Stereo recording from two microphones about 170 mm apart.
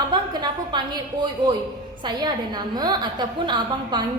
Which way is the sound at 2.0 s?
25° right (ahead or behind).